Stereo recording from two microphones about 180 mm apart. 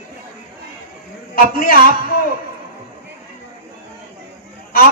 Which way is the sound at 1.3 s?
55° left (ahead or behind).